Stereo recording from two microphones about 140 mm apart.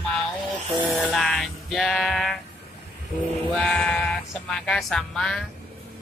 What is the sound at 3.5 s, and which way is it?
Speech, 5° left (ahead or behind).